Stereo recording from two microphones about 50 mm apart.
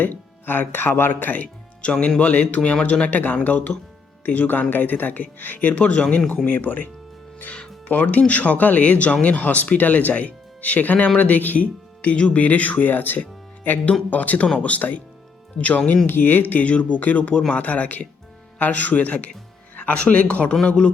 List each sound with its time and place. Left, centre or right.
0.0 s speech: left
1.8 s speech: left
7.9 s speech: left
16.0 s speech: left
19.7 s music: left
20.0 s speech: left